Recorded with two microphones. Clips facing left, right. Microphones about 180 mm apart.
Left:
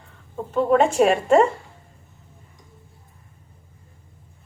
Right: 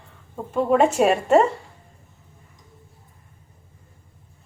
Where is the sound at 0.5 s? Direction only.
5° right (ahead or behind).